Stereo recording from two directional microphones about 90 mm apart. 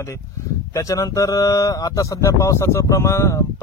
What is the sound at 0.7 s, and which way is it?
Speech, 35° left (ahead or behind).